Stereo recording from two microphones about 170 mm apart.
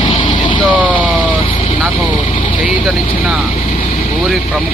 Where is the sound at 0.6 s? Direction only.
10° right (ahead or behind).